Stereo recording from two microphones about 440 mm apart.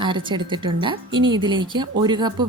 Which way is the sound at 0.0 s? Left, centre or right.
Centre.